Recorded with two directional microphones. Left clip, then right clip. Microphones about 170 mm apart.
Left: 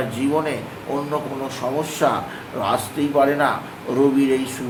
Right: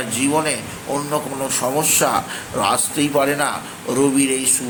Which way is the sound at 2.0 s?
30° right (ahead or behind).